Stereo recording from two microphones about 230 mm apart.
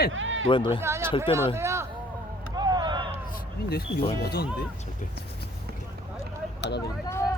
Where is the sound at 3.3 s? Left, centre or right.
Left.